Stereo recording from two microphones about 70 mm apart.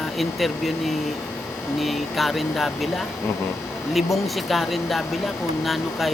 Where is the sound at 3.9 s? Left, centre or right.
Centre.